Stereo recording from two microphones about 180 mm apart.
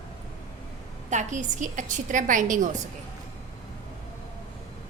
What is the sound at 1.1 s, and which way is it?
Speech, 45° right (ahead or behind).